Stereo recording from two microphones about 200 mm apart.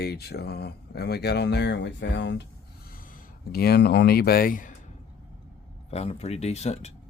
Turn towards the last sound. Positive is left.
turn(degrees=35)  # may be behind; listen again after turning